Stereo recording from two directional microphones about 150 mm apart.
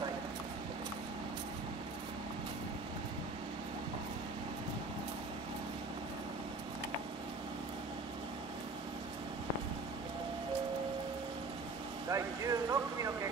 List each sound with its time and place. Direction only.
12.1 s speech: 20° right (ahead or behind)